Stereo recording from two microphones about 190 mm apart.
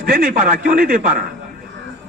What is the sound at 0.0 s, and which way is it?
A man's voice, 50° right (ahead or behind).